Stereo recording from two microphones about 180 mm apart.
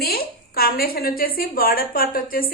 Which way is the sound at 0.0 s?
55° left (ahead or behind).